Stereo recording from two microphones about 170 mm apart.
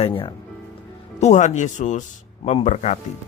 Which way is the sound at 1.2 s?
45° left (ahead or behind).